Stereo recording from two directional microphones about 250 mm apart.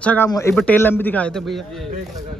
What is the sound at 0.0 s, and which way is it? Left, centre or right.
A man's voice, centre.